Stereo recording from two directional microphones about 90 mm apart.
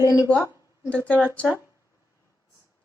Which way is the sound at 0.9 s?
15° left (ahead or behind).